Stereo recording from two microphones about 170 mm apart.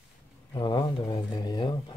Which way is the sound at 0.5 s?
25° left (ahead or behind).